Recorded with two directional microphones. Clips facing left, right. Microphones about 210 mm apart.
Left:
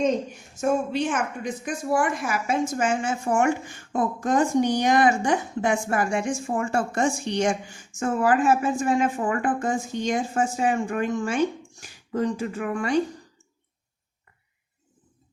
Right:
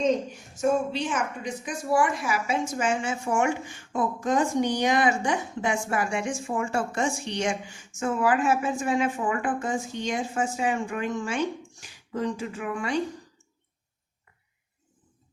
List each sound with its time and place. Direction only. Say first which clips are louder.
0.6 s a woman's voice: left 1 dB; 55° left (ahead or behind)